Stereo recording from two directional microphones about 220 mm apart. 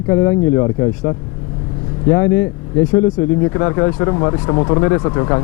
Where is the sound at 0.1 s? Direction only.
15° left (ahead or behind).